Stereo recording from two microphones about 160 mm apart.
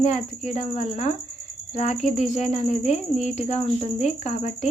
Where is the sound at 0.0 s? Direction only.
50° left (ahead or behind).